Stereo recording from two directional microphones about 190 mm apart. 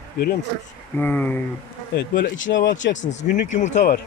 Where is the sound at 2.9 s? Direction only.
40° left (ahead or behind).